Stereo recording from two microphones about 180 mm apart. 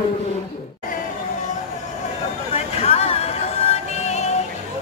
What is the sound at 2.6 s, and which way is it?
Music, 35° left (ahead or behind).